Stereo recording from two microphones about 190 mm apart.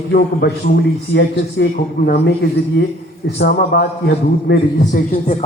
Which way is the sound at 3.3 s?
60° left (ahead or behind).